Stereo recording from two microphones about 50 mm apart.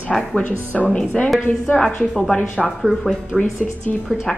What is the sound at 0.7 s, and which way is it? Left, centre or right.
A woman's voice, centre.